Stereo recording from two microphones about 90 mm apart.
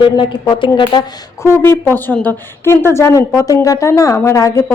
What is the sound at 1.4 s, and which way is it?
Speech, 25° left (ahead or behind).